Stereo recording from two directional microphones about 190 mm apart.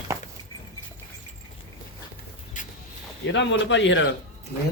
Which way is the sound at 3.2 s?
70° left (ahead or behind).